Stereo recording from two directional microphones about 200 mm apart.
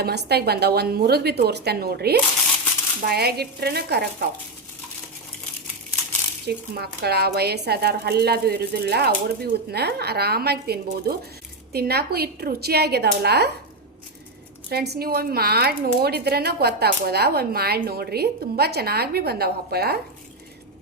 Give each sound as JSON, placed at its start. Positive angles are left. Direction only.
{"t": 0.0, "sound": "speech", "side_deg": -55}
{"t": 6.4, "sound": "speech", "side_deg": -55}
{"t": 14.7, "sound": "speech", "side_deg": -50}